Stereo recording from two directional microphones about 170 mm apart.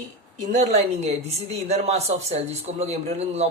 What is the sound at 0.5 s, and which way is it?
A woman's voice, 40° right (ahead or behind).